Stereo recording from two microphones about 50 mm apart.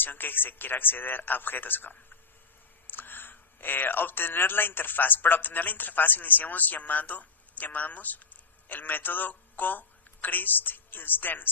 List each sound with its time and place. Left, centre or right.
0.0 s a man's voice: left